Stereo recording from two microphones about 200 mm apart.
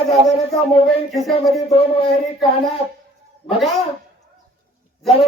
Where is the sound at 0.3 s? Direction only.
30° left (ahead or behind).